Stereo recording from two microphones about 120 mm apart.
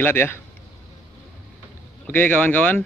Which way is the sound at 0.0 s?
15° left (ahead or behind).